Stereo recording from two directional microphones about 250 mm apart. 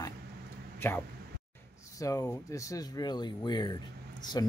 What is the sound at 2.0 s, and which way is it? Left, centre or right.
Speech, centre.